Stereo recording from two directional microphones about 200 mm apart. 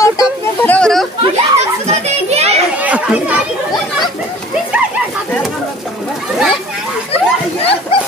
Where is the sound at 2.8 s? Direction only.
10° right (ahead or behind).